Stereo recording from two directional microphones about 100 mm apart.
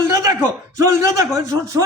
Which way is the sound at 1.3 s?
30° right (ahead or behind).